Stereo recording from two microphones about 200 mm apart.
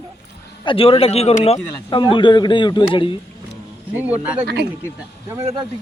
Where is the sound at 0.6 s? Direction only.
25° left (ahead or behind).